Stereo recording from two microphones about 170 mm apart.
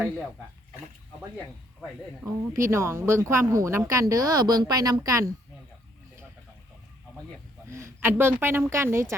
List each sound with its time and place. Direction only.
2.2 s speech: 15° right (ahead or behind)
7.7 s speech: 15° right (ahead or behind)